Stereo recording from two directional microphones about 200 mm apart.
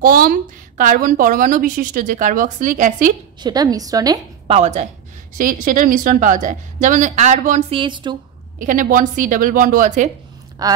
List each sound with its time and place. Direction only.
0.0 s a woman's voice: 45° right (ahead or behind)
3.3 s a woman's voice: 20° right (ahead or behind)
4.6 s a woman's voice: 35° right (ahead or behind)
7.8 s a woman's voice: 25° right (ahead or behind)
8.5 s a woman's voice: 40° right (ahead or behind)
10.6 s a woman's voice: 20° right (ahead or behind)